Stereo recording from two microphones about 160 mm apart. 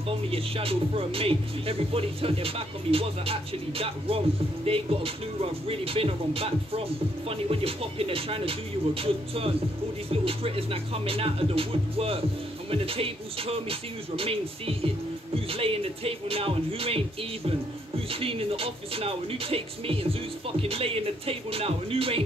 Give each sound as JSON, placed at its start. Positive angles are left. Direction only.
{"t": 0.3, "sound": "speech", "side_deg": -35}